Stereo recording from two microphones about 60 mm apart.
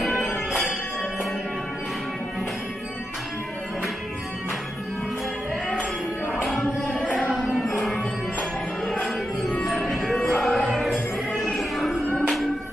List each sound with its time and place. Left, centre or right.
7.2 s music: centre
8.0 s music: centre
9.7 s music: centre